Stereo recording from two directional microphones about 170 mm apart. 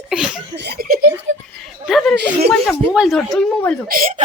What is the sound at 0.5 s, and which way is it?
Speech, 75° right (ahead or behind).